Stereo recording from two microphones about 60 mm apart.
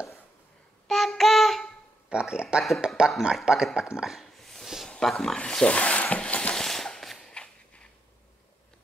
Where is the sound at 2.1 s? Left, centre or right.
Centre.